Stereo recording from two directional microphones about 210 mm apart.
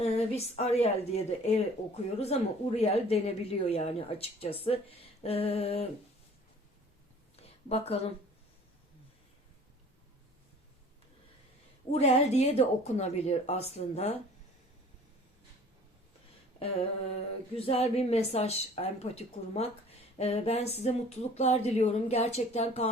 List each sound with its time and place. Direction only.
0.0 s a woman's voice: 30° left (ahead or behind)
7.4 s a woman's voice: 30° left (ahead or behind)
11.9 s a woman's voice: 30° left (ahead or behind)
17.7 s a woman's voice: 30° left (ahead or behind)